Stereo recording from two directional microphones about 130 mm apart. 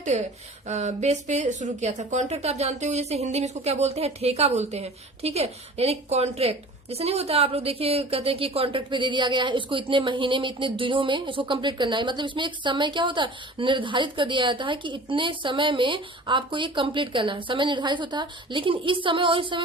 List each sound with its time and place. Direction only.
0.1 s a woman's voice: 70° right (ahead or behind); by 19.6 s 40° right (ahead or behind)